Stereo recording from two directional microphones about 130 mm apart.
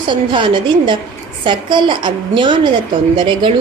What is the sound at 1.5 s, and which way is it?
A woman's voice, 40° right (ahead or behind).